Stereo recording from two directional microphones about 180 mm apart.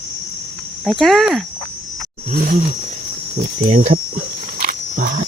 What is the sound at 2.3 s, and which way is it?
Speech, 50° right (ahead or behind).